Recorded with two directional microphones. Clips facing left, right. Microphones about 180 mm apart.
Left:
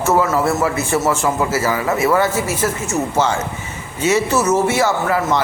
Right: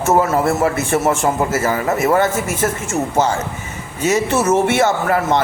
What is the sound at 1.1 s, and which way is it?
A man's voice, 45° right (ahead or behind).